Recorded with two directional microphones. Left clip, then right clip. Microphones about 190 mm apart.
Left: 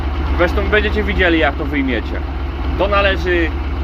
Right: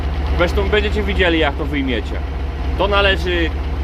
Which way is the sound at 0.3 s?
15° right (ahead or behind).